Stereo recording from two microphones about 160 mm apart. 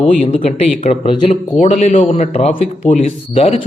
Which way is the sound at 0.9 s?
45° left (ahead or behind).